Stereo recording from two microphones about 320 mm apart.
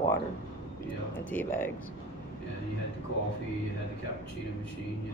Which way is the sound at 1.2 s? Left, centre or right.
Centre.